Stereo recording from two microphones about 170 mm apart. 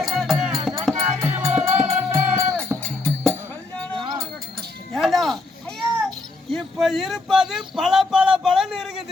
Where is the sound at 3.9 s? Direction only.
25° right (ahead or behind).